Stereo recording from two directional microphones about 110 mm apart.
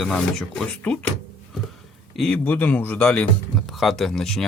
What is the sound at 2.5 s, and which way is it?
Speech, 15° left (ahead or behind).